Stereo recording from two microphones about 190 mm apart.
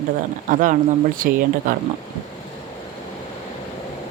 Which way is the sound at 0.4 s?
45° right (ahead or behind).